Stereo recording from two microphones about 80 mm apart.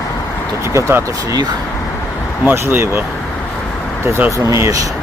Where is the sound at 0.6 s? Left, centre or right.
Right.